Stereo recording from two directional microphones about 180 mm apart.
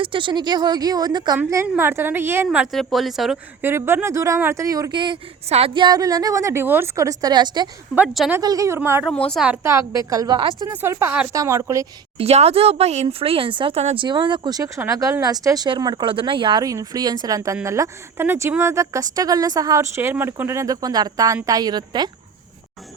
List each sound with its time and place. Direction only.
0.0 s a woman's voice: 25° right (ahead or behind); by 3.7 s centre (ahead or behind)
3.7 s speech: 15° right (ahead or behind)
7.9 s a woman's voice: 5° right (ahead or behind)
8.4 s a woman's voice: 20° right (ahead or behind); by 9.6 s 5° right (ahead or behind)
9.6 s a woman's voice: 15° right (ahead or behind)
10.7 s a woman's voice: 10° right (ahead or behind)
12.1 s speech: 35° right (ahead or behind)